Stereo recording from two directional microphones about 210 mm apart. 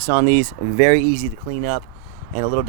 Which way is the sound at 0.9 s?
45° right (ahead or behind).